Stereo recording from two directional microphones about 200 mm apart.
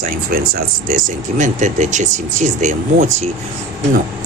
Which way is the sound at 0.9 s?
40° right (ahead or behind).